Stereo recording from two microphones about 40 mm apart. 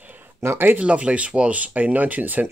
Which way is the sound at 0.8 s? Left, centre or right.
Right.